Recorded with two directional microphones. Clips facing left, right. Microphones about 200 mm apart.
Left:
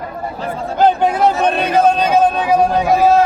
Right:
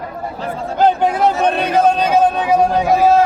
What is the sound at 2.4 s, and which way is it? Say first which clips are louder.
Speech: even; 25° right (ahead or behind).